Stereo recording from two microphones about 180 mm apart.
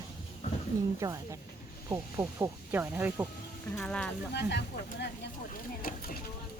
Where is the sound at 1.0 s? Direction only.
20° right (ahead or behind).